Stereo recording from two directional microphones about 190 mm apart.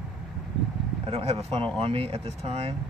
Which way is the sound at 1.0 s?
35° right (ahead or behind).